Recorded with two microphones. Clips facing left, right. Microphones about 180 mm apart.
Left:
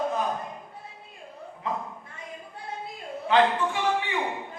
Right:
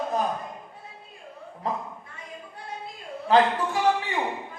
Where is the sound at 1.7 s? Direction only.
40° right (ahead or behind).